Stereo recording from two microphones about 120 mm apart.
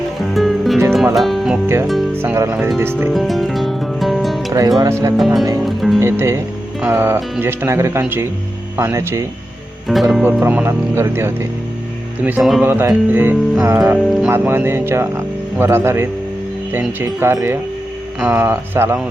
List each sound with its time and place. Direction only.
0.2 s music: centre (ahead or behind)
1.6 s speech: 20° right (ahead or behind)
3.1 s music: centre (ahead or behind)
4.8 s speech: 25° right (ahead or behind)
5.1 s speech: centre (ahead or behind)
5.5 s music: centre (ahead or behind)
6.0 s speech: 20° right (ahead or behind)
9.9 s speech: centre (ahead or behind)
10.4 s speech: 15° right (ahead or behind)
12.4 s speech: centre (ahead or behind)
12.6 s speech: 20° right (ahead or behind)